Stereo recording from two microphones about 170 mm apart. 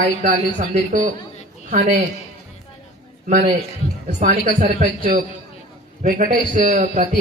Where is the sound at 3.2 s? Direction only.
50° right (ahead or behind).